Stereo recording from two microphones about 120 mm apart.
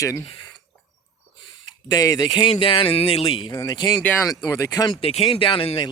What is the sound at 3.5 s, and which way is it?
Speech, 25° left (ahead or behind).